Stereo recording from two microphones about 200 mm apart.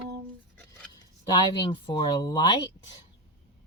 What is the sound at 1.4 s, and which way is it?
Speech, 25° left (ahead or behind).